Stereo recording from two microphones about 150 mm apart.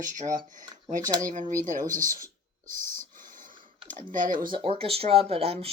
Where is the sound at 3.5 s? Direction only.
35° right (ahead or behind).